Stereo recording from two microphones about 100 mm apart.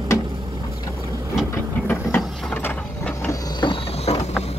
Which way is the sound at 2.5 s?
15° left (ahead or behind).